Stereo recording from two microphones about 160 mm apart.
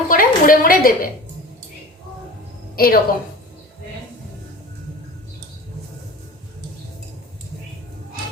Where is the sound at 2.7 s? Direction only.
70° left (ahead or behind).